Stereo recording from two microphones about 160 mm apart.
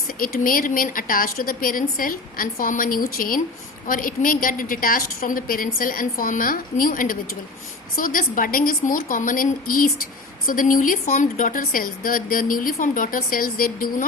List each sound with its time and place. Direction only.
0.2 s a woman's voice: 60° left (ahead or behind)